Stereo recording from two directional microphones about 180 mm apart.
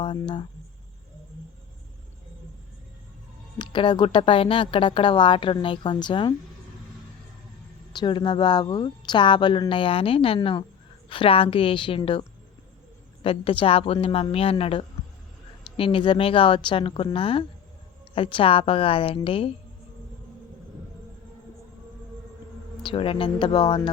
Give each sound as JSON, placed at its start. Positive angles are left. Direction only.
{"t": 0.0, "sound": "speech", "side_deg": 25}
{"t": 3.6, "sound": "speech", "side_deg": 25}
{"t": 7.9, "sound": "speech", "side_deg": 25}
{"t": 13.2, "sound": "a woman's voice", "side_deg": 30}
{"t": 22.8, "sound": "speech", "side_deg": 30}